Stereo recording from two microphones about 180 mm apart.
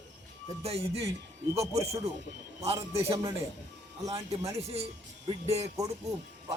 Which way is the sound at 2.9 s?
35° right (ahead or behind).